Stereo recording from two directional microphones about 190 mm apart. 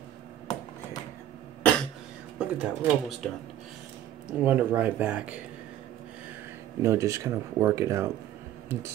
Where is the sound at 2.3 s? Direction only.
5° right (ahead or behind).